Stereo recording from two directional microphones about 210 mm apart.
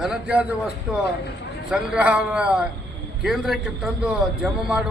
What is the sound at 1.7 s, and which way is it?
A man's voice, 5° right (ahead or behind).